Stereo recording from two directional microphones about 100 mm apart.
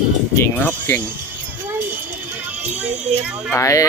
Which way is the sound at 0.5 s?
20° left (ahead or behind).